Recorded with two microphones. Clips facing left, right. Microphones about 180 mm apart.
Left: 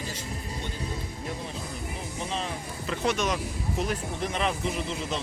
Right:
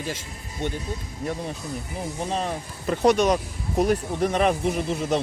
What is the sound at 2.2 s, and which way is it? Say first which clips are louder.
Speech: right 5 dB; 50° right (ahead or behind).